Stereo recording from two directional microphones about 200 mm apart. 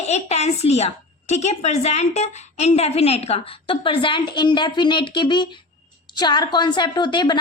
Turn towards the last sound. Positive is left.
turn(degrees=20)  # may be behind; listen again after turning